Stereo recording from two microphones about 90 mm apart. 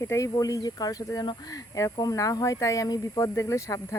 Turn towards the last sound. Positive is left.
turn(degrees=35)  # may be behind; listen again after turning